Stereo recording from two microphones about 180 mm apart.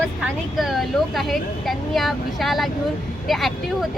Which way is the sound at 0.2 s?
Centre (ahead or behind).